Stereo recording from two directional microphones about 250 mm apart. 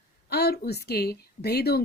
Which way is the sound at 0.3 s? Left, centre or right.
Left.